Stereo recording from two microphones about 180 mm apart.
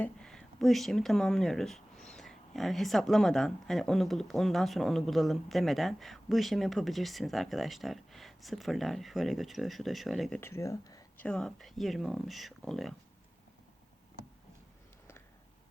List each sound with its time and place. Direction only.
0.0 s speech: 5° left (ahead or behind)
10.4 s speech: 15° left (ahead or behind)
11.3 s speech: 5° left (ahead or behind)